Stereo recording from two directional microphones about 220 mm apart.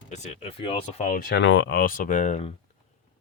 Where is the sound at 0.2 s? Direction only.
30° left (ahead or behind).